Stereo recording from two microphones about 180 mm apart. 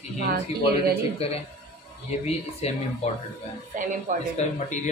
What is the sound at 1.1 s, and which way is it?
Speech, 35° left (ahead or behind).